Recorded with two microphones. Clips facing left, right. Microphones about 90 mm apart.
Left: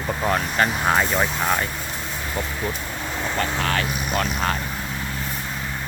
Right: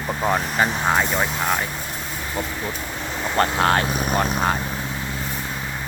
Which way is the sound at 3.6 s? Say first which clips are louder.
Right 5 dB; 35° right (ahead or behind).